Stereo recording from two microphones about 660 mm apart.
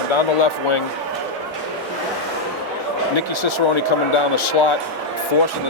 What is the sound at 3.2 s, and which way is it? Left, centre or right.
Speech, left.